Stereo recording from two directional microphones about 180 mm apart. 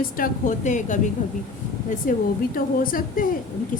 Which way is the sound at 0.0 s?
50° left (ahead or behind).